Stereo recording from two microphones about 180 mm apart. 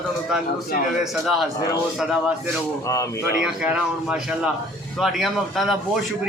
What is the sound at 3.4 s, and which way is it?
A man's voice, 5° right (ahead or behind).